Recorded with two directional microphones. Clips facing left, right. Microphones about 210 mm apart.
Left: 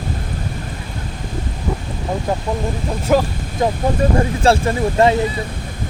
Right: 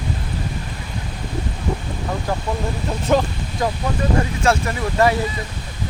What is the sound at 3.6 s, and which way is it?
Speech, 25° left (ahead or behind).